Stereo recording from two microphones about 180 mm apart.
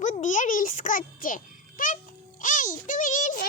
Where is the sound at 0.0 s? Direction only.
45° left (ahead or behind).